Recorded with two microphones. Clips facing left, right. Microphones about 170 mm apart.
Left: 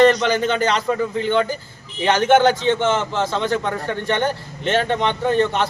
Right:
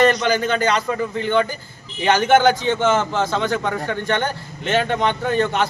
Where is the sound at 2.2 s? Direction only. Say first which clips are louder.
Left 1 dB; 30° left (ahead or behind).